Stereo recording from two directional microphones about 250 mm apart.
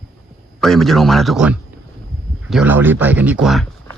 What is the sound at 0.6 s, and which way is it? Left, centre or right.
A man's voice, centre.